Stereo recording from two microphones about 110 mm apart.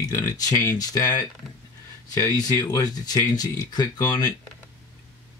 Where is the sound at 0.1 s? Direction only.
30° left (ahead or behind).